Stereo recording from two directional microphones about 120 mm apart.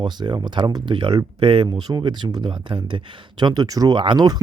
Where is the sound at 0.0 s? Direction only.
40° right (ahead or behind).